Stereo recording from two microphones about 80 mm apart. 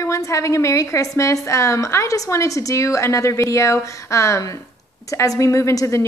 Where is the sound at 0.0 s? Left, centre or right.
Left.